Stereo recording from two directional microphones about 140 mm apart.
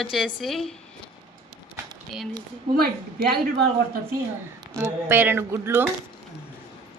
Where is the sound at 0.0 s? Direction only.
Centre (ahead or behind).